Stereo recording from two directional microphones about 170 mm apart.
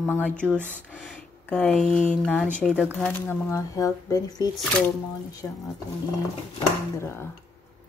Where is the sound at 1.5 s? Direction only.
10° left (ahead or behind).